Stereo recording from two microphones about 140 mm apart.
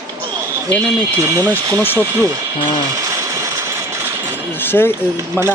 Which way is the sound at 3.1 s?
25° right (ahead or behind).